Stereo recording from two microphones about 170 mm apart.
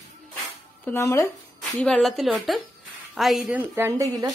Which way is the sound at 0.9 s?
15° left (ahead or behind).